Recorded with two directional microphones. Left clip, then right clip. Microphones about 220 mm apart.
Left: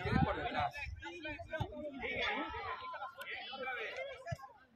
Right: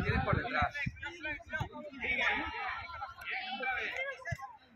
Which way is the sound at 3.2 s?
40° right (ahead or behind).